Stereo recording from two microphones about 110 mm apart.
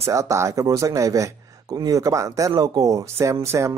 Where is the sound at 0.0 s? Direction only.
30° right (ahead or behind).